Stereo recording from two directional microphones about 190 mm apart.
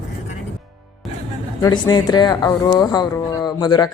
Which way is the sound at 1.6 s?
20° left (ahead or behind).